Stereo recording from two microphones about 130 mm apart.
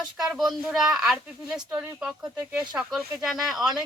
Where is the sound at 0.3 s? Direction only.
Centre (ahead or behind).